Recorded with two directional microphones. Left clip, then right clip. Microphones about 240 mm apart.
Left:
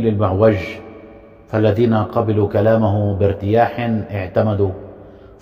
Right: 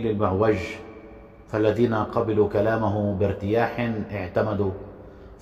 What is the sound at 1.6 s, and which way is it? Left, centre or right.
Speech, left.